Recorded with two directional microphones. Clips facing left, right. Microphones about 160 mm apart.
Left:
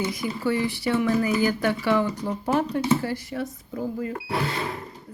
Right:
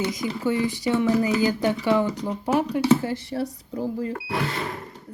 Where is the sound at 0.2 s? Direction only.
20° right (ahead or behind).